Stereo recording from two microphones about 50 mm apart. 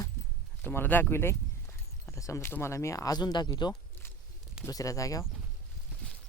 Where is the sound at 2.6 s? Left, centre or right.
Left.